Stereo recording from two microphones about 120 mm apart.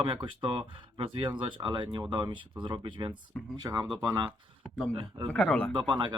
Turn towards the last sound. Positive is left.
turn(degrees=-45)  # may be behind; listen again after turning